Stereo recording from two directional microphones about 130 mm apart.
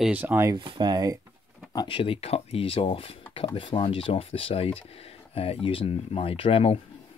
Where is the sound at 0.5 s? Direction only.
40° right (ahead or behind).